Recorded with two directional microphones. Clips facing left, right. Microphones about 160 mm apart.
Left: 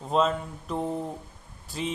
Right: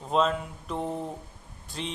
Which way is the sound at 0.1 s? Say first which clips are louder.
Left 1 dB; centre (ahead or behind).